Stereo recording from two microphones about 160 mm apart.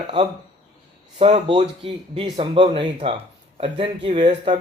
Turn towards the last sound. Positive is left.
turn(degrees=-30)  # may be behind; listen again after turning